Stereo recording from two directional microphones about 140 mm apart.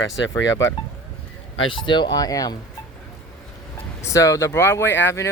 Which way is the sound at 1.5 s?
35° left (ahead or behind).